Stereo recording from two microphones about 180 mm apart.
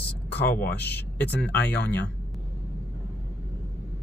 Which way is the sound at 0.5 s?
60° left (ahead or behind).